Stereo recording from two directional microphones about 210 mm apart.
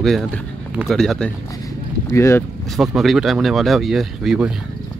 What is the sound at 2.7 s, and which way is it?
Speech, centre (ahead or behind).